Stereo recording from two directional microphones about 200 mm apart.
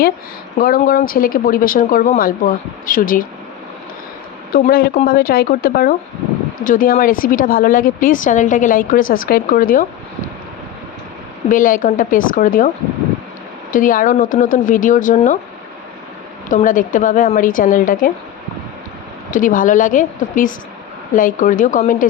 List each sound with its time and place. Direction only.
0.6 s speech: 45° left (ahead or behind)
4.5 s speech: 50° left (ahead or behind)
11.4 s a woman's voice: 40° left (ahead or behind)
13.7 s a woman's voice: 40° left (ahead or behind)
16.5 s a woman's voice: 40° left (ahead or behind)
19.3 s a woman's voice: 40° left (ahead or behind)